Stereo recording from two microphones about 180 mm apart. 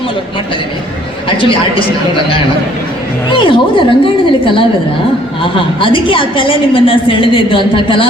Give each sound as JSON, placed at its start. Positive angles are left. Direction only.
{"t": 1.4, "sound": "a woman's voice", "side_deg": 30}